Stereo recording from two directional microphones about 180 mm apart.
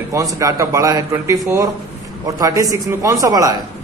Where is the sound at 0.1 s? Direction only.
20° right (ahead or behind).